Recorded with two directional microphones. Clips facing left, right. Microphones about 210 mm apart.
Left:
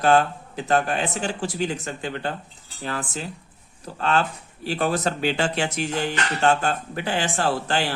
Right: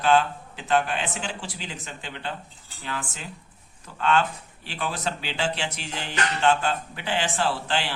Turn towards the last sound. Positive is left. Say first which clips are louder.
# left 3 dB
turn(degrees=45)  # may be behind; listen again after turning